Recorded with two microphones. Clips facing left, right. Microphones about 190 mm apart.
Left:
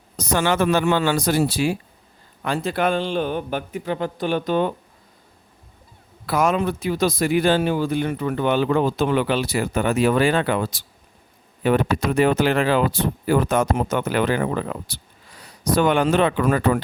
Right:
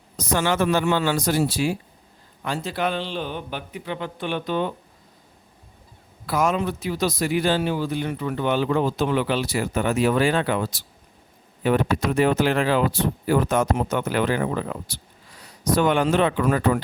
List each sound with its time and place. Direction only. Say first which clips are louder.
0.2 s a man's voice: left 2 dB; 60° left (ahead or behind)
6.2 s speech: left 2 dB; 65° left (ahead or behind)